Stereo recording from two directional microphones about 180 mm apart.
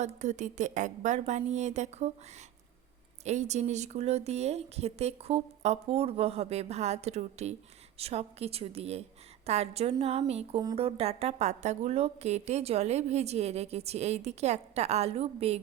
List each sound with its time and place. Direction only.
0.0 s a woman's voice: 40° right (ahead or behind)
3.2 s a woman's voice: 40° right (ahead or behind)